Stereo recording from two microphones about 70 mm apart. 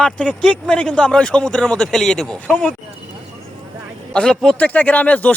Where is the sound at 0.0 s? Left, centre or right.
Centre.